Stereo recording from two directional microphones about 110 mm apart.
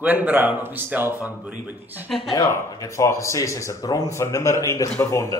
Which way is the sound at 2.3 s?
30° left (ahead or behind).